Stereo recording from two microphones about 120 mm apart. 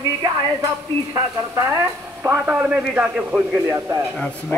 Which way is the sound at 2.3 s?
5° right (ahead or behind).